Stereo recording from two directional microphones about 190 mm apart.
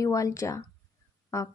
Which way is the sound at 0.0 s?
15° left (ahead or behind).